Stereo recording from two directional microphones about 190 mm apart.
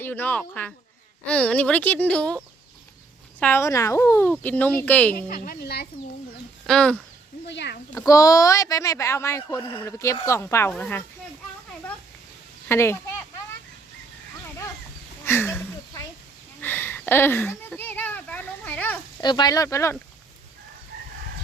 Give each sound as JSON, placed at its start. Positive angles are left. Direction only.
{"t": 0.0, "sound": "speech", "side_deg": 10}
{"t": 3.4, "sound": "speech", "side_deg": 15}
{"t": 5.1, "sound": "speech", "side_deg": 50}
{"t": 6.7, "sound": "speech", "side_deg": 5}
{"t": 7.4, "sound": "speech", "side_deg": 65}
{"t": 7.9, "sound": "speech", "side_deg": 15}
{"t": 12.6, "sound": "speech", "side_deg": 15}
{"t": 15.2, "sound": "a sound", "side_deg": 15}
{"t": 16.6, "sound": "a child's voice", "side_deg": 10}
{"t": 19.2, "sound": "speech", "side_deg": 20}